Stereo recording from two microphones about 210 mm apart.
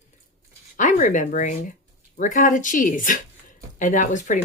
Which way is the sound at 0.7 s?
35° left (ahead or behind).